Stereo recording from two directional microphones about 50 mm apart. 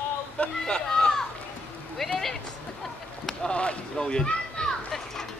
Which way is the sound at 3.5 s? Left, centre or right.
Left.